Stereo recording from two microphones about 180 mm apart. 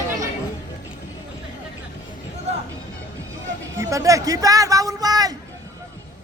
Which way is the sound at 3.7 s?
15° right (ahead or behind).